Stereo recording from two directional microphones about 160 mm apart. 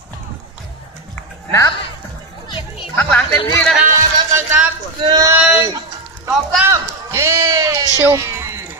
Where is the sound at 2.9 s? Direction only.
10° left (ahead or behind).